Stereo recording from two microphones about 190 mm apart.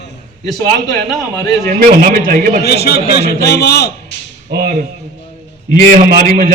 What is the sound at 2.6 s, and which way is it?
A man's voice, 55° left (ahead or behind).